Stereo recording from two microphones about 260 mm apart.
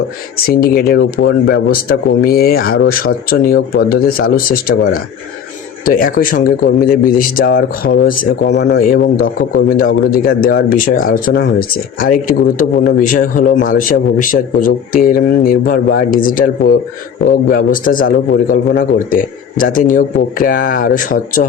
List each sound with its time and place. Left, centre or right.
0.3 s speech: left